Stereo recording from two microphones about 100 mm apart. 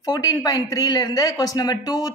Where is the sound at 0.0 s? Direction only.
35° left (ahead or behind).